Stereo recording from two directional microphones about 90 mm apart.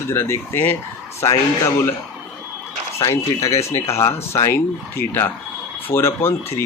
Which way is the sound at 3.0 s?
35° left (ahead or behind).